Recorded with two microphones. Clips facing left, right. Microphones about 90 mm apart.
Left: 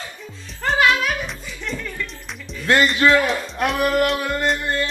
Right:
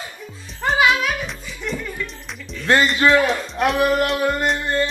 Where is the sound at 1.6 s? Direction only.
10° right (ahead or behind).